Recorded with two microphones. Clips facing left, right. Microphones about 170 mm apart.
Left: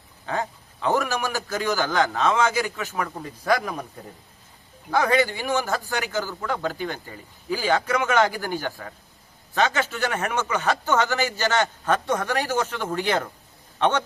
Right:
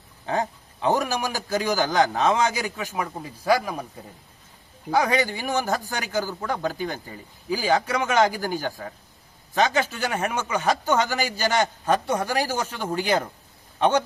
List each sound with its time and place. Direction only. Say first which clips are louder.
0.3 s a man's voice: right 2 dB; 20° right (ahead or behind)
4.9 s a man's voice: left 1 dB; 15° right (ahead or behind)
8.8 s a man's voice: right 2 dB; 25° right (ahead or behind)
9.6 s a man's voice: right 1 dB; 15° right (ahead or behind)